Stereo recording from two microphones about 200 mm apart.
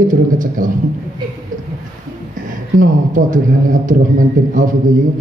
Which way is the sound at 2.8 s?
40° right (ahead or behind).